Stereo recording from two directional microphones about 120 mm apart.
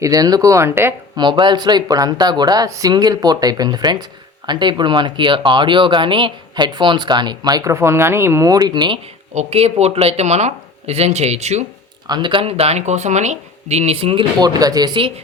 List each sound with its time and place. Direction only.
0.0 s speech: 30° right (ahead or behind)
1.1 s speech: 40° right (ahead or behind)
9.3 s speech: 70° right (ahead or behind)
12.0 s speech: 40° right (ahead or behind)
14.3 s speech: 35° right (ahead or behind)